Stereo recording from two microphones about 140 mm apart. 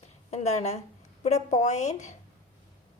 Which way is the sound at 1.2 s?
55° left (ahead or behind).